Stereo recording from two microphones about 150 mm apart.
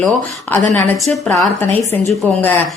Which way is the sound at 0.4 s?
15° left (ahead or behind).